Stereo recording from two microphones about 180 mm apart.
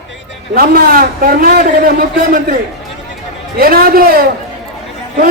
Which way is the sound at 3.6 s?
55° right (ahead or behind).